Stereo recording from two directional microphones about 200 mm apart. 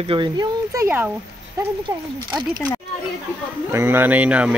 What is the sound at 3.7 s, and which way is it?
Speech, 10° right (ahead or behind).